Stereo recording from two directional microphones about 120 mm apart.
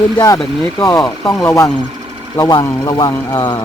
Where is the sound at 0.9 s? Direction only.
35° left (ahead or behind).